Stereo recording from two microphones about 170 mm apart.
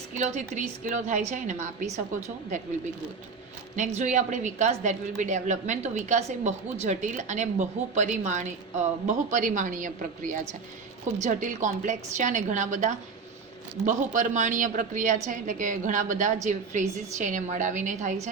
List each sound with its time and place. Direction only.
0.2 s a woman's voice: 45° right (ahead or behind)
3.8 s a woman's voice: 45° right (ahead or behind)